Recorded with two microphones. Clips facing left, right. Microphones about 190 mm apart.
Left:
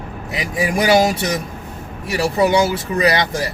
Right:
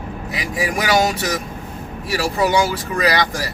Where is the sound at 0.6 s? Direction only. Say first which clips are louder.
Left 4 dB; 25° left (ahead or behind).